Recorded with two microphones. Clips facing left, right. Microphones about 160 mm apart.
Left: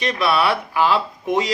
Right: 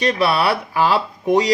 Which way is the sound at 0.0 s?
35° right (ahead or behind).